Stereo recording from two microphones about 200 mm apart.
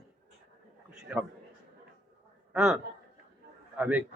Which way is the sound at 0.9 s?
5° right (ahead or behind).